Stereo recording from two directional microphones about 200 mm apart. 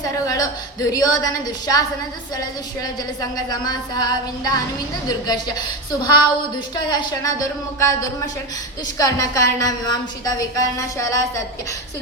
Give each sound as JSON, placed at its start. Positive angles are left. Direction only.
{"t": 0.0, "sound": "a woman's voice", "side_deg": 20}
{"t": 2.8, "sound": "a woman's voice", "side_deg": 20}
{"t": 9.0, "sound": "a woman's voice", "side_deg": 15}